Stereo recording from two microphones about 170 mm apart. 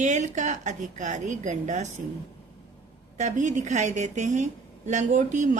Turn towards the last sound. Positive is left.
turn(degrees=-45)  # may be behind; listen again after turning